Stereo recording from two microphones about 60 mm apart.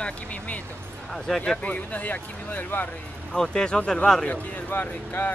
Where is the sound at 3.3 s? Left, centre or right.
Centre.